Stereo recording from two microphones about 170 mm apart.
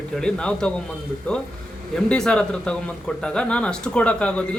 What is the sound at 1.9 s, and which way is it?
Speech, 5° left (ahead or behind).